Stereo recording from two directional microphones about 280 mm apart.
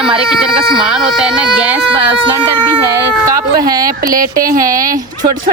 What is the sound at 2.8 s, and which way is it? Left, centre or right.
Speech, centre.